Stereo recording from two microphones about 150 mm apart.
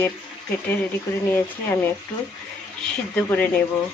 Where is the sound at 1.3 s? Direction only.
15° left (ahead or behind).